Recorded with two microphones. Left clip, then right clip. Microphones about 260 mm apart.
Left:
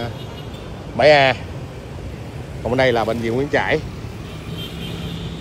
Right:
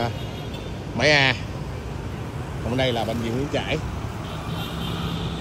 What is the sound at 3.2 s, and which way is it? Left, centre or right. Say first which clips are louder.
Speech: left 7 dB; centre.